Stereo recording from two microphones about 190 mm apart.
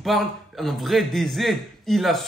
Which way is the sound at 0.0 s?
Centre (ahead or behind).